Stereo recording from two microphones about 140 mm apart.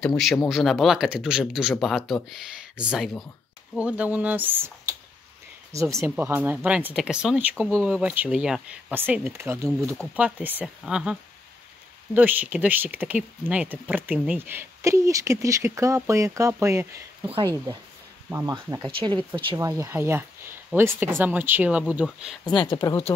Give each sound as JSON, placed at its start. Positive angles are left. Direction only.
{"t": 0.0, "sound": "speech", "side_deg": 5}
{"t": 8.9, "sound": "speech", "side_deg": -15}
{"t": 18.3, "sound": "speech", "side_deg": -20}
{"t": 18.9, "sound": "speech", "side_deg": -40}
{"t": 19.4, "sound": "speech", "side_deg": -25}
{"t": 22.7, "sound": "speech", "side_deg": 35}